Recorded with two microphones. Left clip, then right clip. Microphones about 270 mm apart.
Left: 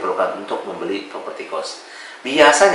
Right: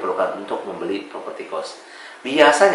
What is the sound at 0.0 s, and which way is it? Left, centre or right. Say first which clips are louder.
Speech: left 2 dB; centre.